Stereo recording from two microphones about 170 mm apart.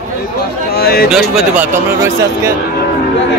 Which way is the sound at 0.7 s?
65° left (ahead or behind).